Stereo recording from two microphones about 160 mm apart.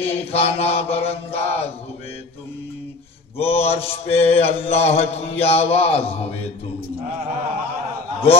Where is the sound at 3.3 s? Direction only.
40° left (ahead or behind).